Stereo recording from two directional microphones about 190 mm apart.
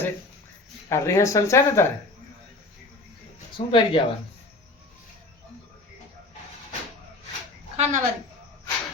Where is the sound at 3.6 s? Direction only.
35° left (ahead or behind).